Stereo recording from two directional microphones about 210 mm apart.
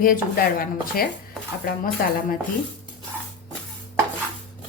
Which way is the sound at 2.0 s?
45° left (ahead or behind).